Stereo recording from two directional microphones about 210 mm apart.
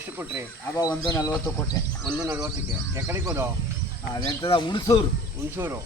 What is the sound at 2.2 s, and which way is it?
Speech, 10° right (ahead or behind).